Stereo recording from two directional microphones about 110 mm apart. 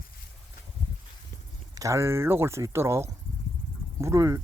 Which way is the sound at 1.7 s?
30° right (ahead or behind).